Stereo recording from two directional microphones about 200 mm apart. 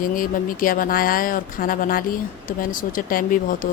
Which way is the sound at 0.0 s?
45° left (ahead or behind).